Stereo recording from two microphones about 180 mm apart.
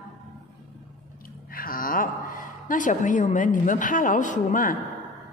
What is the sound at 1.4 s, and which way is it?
A woman's voice, 50° left (ahead or behind).